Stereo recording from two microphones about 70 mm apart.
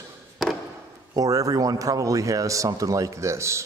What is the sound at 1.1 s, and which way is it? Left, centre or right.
Speech, right.